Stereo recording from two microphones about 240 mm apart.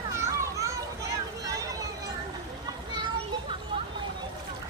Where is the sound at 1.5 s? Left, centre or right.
Centre.